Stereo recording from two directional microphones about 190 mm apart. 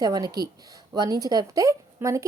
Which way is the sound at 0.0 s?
20° right (ahead or behind).